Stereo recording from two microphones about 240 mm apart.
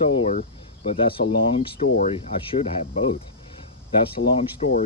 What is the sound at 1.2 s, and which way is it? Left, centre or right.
Speech, left.